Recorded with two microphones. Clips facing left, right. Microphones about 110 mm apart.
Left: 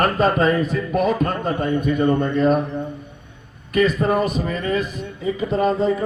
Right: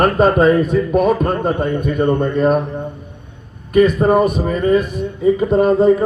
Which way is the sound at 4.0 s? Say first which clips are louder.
Right 6 dB; 45° right (ahead or behind).